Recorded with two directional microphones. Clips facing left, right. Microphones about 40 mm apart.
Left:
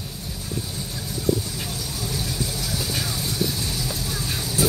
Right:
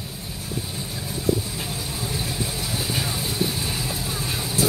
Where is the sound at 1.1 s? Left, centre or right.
Right.